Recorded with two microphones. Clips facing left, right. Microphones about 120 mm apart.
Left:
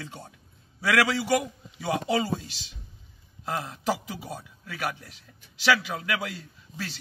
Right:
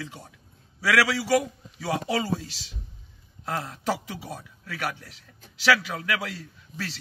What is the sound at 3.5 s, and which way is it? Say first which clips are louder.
A man's voice: even; 25° left (ahead or behind).